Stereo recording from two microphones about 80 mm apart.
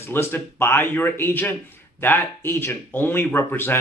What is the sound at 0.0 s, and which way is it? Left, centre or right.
A man's voice, left.